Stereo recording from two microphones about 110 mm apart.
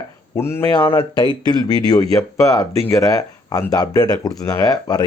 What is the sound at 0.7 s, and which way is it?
Speech, 35° left (ahead or behind).